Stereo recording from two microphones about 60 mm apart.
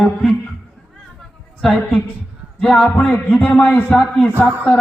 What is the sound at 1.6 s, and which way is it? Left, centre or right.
A man's voice, centre.